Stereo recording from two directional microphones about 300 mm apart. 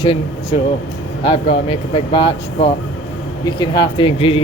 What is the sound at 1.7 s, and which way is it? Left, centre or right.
Speech, centre.